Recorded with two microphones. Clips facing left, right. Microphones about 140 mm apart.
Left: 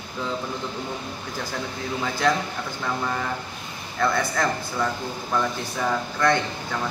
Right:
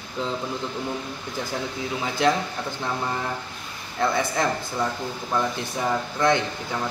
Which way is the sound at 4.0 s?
25° right (ahead or behind).